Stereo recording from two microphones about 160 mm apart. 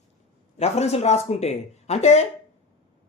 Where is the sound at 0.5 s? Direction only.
40° left (ahead or behind).